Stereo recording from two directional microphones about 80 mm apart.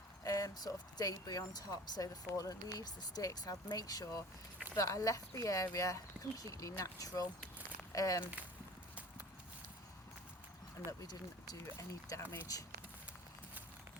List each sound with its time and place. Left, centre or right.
0.3 s speech: left
8.2 s speech: right
11.0 s speech: left
11.6 s speech: left